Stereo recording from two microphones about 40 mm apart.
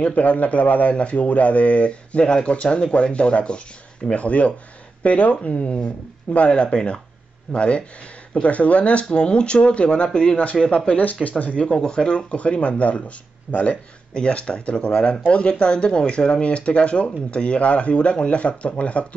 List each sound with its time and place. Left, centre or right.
0.0 s speech: left
11.6 s speech: left